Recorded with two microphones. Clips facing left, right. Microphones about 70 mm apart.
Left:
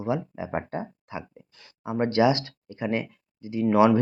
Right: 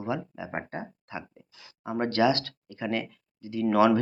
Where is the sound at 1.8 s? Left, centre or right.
Centre.